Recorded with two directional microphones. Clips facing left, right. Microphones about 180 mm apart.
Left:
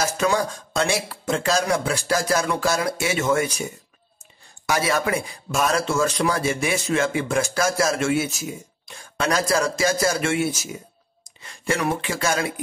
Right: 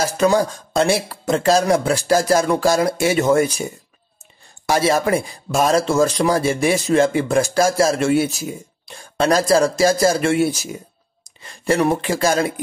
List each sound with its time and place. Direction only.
0.0 s speech: 35° right (ahead or behind)
4.6 s speech: 30° right (ahead or behind)